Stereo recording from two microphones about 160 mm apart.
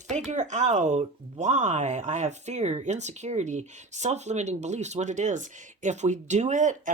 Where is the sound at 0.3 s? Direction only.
50° right (ahead or behind).